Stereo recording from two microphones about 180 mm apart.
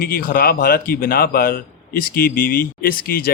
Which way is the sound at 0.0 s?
55° left (ahead or behind).